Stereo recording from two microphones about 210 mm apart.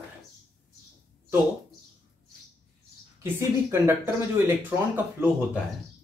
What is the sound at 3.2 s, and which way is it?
Speech, 15° right (ahead or behind).